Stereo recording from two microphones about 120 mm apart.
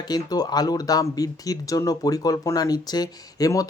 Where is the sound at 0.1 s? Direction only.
35° left (ahead or behind).